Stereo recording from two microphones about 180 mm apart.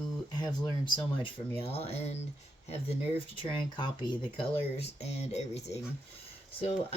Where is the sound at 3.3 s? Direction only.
25° left (ahead or behind).